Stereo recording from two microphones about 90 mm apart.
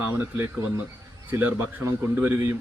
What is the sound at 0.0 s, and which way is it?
Speech, 25° right (ahead or behind).